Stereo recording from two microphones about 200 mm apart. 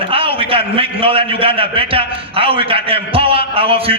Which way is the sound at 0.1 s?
30° right (ahead or behind).